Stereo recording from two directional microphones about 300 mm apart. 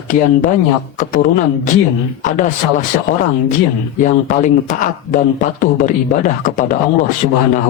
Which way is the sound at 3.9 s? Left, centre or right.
Left.